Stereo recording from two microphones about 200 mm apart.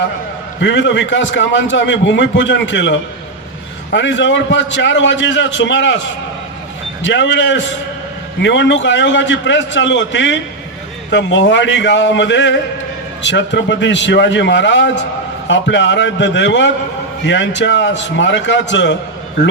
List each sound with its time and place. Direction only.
0.6 s a man's voice: 65° left (ahead or behind)
3.9 s a man's voice: 65° left (ahead or behind)
7.0 s a man's voice: 65° left (ahead or behind)